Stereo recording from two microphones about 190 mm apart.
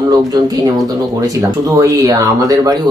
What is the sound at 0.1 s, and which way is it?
Speech, 20° right (ahead or behind).